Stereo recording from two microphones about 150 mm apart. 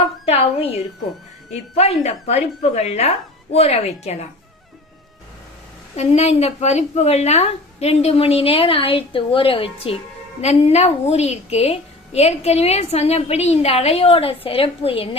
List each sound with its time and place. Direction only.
0.3 s a sound: 40° left (ahead or behind)
1.7 s a woman's voice: 45° left (ahead or behind)
6.0 s a woman's voice: 45° left (ahead or behind)